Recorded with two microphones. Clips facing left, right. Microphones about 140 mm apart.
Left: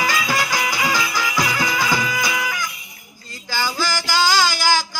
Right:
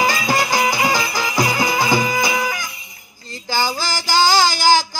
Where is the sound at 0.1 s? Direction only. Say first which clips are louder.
Right 2 dB; 40° right (ahead or behind).